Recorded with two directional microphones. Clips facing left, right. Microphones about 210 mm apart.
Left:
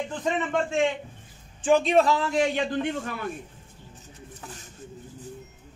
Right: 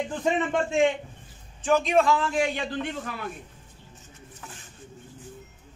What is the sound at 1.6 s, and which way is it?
Speech, 30° left (ahead or behind).